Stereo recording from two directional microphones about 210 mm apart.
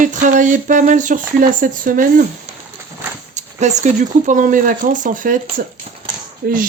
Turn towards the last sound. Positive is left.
turn(degrees=-45)  # may be behind; listen again after turning